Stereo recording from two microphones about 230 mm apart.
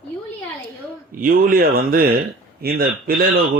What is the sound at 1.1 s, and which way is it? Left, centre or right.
A man's voice, right.